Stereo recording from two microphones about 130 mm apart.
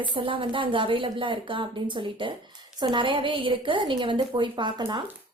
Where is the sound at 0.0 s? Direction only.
40° right (ahead or behind).